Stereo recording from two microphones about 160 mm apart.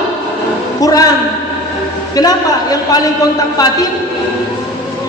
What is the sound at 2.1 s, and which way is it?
A man's voice, 25° left (ahead or behind).